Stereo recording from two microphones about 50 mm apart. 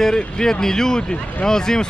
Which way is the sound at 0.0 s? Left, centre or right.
Centre.